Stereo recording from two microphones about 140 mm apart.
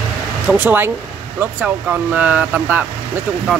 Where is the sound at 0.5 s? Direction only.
10° right (ahead or behind).